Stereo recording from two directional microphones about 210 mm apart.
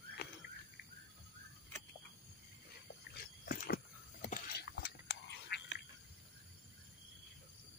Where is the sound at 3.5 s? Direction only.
40° left (ahead or behind).